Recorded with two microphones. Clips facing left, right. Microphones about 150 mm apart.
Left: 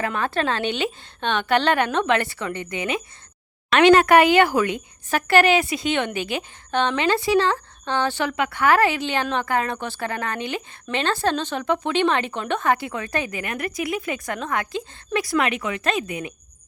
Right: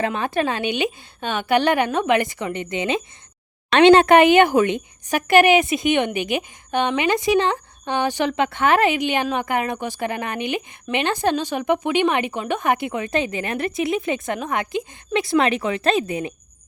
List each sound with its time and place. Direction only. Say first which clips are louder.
0.0 s a woman's voice: right 2 dB; 15° right (ahead or behind)